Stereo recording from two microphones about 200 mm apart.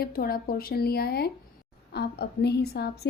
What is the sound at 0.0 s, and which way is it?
Speech, 50° left (ahead or behind).